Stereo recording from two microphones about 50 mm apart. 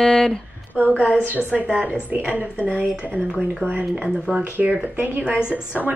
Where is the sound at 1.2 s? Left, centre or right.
Right.